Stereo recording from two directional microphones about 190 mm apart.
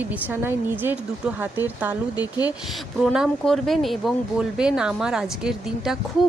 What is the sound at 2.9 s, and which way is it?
Speech, centre (ahead or behind).